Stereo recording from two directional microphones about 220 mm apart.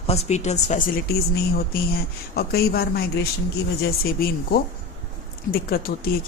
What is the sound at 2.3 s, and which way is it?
Speech, 45° left (ahead or behind).